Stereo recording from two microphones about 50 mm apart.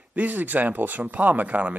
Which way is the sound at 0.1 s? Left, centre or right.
Right.